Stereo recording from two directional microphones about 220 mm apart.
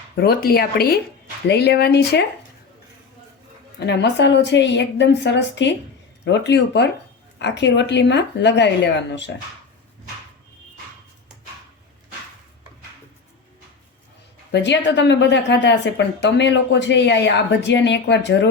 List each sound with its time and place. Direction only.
0.2 s a woman's voice: 45° left (ahead or behind)
3.8 s a woman's voice: 50° left (ahead or behind)
14.5 s a woman's voice: 50° left (ahead or behind)